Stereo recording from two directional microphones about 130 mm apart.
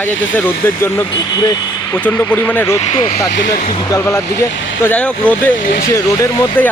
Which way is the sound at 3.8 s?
25° left (ahead or behind).